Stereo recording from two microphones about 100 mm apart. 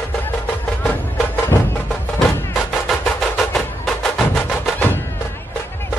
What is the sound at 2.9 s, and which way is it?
Music, 5° left (ahead or behind).